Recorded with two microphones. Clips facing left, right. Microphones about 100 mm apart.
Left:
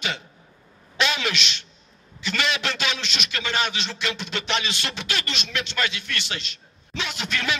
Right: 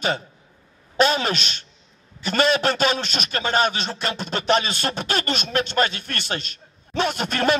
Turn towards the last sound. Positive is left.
turn(degrees=-45)  # may be behind; listen again after turning